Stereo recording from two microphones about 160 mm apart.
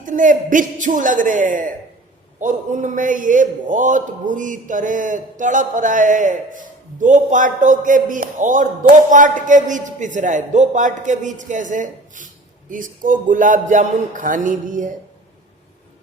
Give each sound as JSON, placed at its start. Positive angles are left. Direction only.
{"t": 0.0, "sound": "speech", "side_deg": -55}